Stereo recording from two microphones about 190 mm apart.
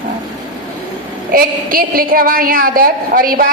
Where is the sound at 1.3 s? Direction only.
50° right (ahead or behind).